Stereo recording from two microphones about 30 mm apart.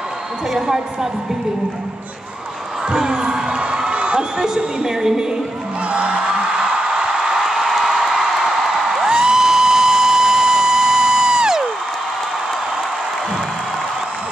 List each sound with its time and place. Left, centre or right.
2.9 s crowd: right
3.9 s crowd: right
4.8 s a woman's voice: centre
5.9 s music: right
7.2 s a sound: centre
8.2 s music: centre